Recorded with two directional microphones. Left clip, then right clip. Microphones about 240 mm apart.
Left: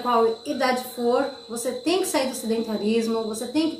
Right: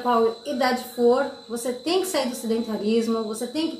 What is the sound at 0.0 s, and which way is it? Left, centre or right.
A woman's voice, centre.